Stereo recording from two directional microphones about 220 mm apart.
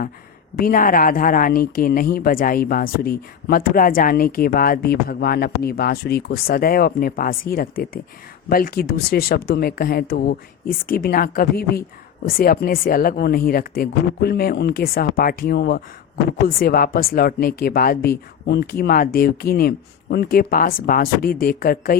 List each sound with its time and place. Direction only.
0.5 s speech: 40° left (ahead or behind)